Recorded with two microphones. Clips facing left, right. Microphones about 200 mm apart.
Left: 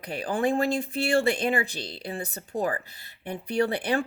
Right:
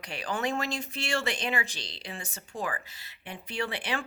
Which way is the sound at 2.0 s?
35° left (ahead or behind).